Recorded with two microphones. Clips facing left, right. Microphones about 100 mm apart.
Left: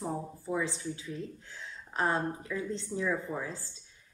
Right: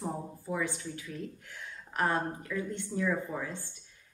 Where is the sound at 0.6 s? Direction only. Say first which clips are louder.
Left 1 dB; 25° left (ahead or behind).